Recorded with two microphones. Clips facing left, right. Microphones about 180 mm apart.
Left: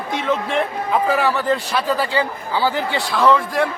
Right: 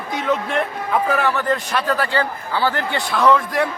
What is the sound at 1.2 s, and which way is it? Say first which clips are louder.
A man's voice: left 1 dB; 5° left (ahead or behind).